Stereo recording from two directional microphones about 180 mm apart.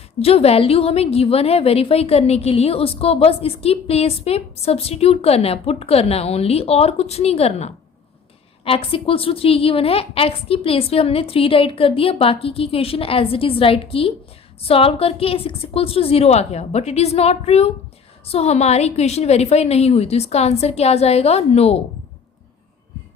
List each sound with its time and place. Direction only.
0.2 s a woman's voice: 35° left (ahead or behind)